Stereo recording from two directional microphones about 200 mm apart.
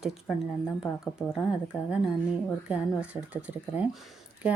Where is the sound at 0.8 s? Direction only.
15° left (ahead or behind).